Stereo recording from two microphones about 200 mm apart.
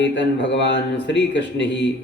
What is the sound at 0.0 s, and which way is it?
Speech, 60° left (ahead or behind).